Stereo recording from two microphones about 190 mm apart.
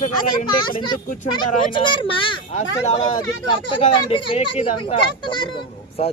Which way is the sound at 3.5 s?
25° left (ahead or behind).